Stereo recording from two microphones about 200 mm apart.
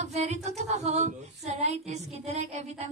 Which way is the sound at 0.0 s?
35° right (ahead or behind).